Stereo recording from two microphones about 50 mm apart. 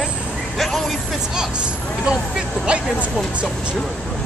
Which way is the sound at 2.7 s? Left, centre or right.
Right.